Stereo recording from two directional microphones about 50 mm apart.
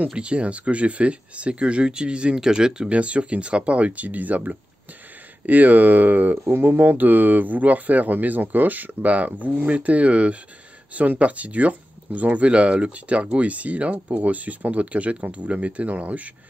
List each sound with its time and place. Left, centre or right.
0.1 s speech: right
2.9 s speech: right
6.3 s speech: right